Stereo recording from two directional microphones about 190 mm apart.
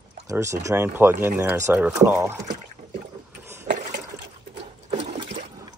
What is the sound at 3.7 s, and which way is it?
Water, 45° right (ahead or behind).